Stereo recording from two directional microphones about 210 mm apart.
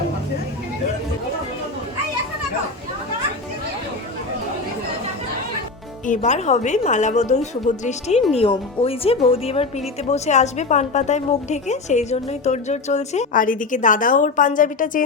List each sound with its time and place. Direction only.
6.1 s a woman's voice: 35° left (ahead or behind)